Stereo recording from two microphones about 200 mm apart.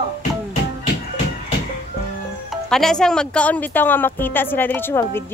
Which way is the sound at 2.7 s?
5° left (ahead or behind).